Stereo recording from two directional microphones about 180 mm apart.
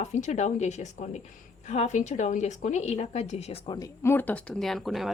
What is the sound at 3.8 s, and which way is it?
A woman's voice, 15° left (ahead or behind).